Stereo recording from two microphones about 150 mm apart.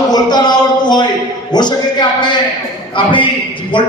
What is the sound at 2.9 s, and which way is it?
Speech, 35° left (ahead or behind).